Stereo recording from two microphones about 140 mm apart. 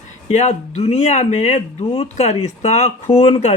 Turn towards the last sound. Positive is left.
turn(degrees=45)  # may be behind; listen again after turning